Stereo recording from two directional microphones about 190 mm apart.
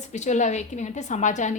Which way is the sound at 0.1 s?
40° left (ahead or behind).